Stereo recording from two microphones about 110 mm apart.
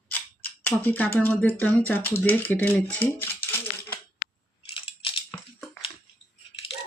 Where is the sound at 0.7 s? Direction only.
15° left (ahead or behind).